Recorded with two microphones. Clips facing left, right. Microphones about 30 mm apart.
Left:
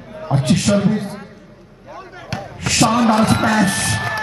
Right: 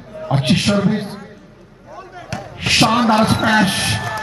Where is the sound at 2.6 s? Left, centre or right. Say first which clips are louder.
Right 1 dB; right.